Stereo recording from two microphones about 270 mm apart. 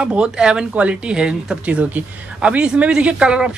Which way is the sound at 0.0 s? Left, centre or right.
Centre.